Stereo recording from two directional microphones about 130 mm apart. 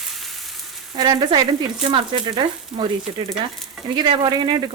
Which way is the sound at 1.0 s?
35° right (ahead or behind).